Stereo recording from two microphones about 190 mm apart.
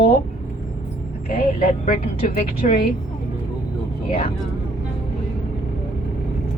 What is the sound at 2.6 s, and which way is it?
Speech, 40° left (ahead or behind).